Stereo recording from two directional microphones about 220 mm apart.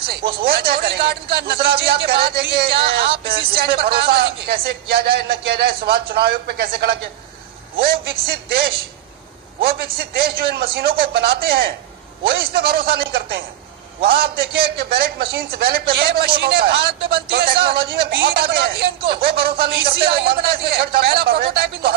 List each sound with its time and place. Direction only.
0.5 s a man's voice: 45° right (ahead or behind)